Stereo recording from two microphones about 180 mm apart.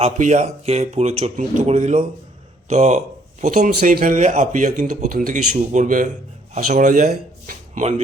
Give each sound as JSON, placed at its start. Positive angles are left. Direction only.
{"t": 0.0, "sound": "speech", "side_deg": -40}